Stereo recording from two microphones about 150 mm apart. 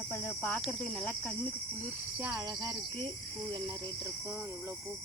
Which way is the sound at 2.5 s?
25° right (ahead or behind).